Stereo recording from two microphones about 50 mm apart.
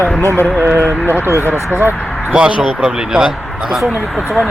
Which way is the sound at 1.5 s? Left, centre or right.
Right.